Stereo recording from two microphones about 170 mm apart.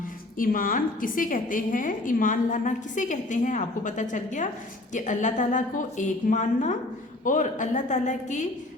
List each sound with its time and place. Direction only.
0.3 s a woman's voice: 55° left (ahead or behind)